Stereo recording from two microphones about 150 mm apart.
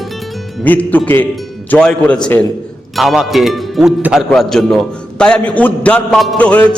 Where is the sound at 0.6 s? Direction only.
10° left (ahead or behind).